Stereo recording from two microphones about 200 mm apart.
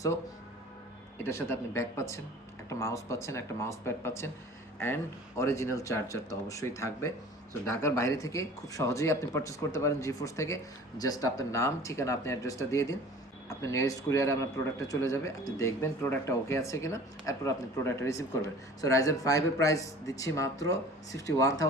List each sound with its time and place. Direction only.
1.2 s a man's voice: 15° left (ahead or behind)
5.4 s a man's voice: 15° left (ahead or behind)